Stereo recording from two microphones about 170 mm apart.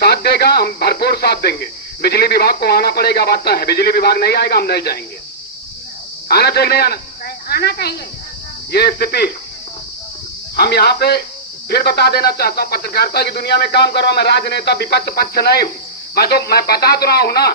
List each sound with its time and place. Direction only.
0.0 s a man's voice: 70° left (ahead or behind)
6.2 s a man's voice: 65° left (ahead or behind)
10.6 s a man's voice: 70° left (ahead or behind)